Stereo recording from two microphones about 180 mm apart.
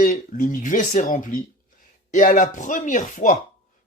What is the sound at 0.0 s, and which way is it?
Speech, 45° left (ahead or behind).